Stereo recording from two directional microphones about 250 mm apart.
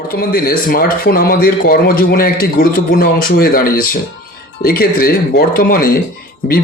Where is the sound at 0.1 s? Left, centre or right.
Left.